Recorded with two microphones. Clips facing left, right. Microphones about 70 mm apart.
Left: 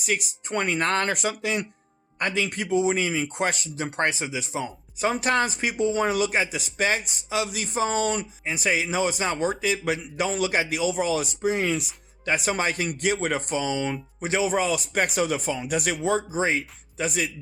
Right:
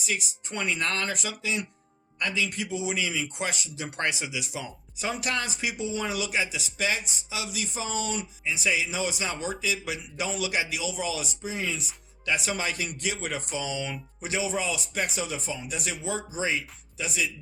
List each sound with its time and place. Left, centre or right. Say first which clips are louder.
0.0 s speech: left 4 dB; left
3.8 s speech: left 4 dB; left
12.2 s speech: left 4 dB; left